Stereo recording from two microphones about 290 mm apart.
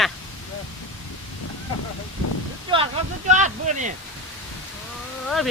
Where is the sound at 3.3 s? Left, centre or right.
Right.